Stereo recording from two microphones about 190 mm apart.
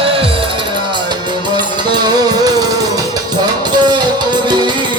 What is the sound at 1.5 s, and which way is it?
Music, 20° right (ahead or behind).